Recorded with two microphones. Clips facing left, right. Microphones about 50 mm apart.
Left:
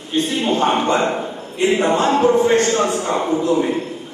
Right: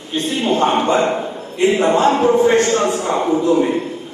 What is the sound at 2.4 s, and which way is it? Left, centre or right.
Speech, right.